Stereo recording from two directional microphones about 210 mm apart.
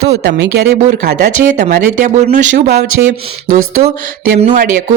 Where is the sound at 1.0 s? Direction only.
35° right (ahead or behind).